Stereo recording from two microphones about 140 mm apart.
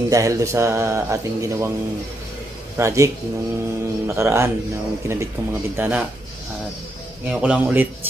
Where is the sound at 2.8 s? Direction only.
20° right (ahead or behind).